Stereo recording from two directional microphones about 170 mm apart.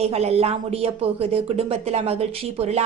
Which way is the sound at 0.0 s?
40° right (ahead or behind).